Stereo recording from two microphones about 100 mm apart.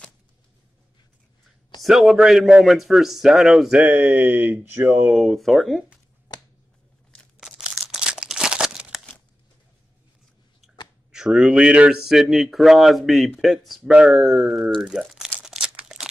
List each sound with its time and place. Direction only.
1.8 s a man's voice: centre (ahead or behind); by 5.1 s 20° right (ahead or behind)
5.1 s a man's voice: centre (ahead or behind)
6.3 s a sound: 45° left (ahead or behind)
7.3 s crumpling: 5° right (ahead or behind)
11.1 s a man's voice: 5° right (ahead or behind)
15.4 s crumpling: 5° right (ahead or behind)